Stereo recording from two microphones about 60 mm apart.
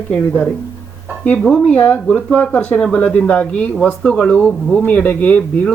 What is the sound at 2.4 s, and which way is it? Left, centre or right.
Speech, left.